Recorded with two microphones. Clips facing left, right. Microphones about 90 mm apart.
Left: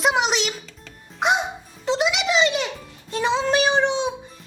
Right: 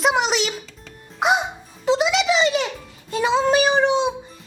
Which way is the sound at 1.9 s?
Centre (ahead or behind).